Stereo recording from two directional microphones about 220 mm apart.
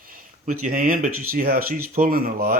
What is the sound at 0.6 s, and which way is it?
Speech, 40° right (ahead or behind).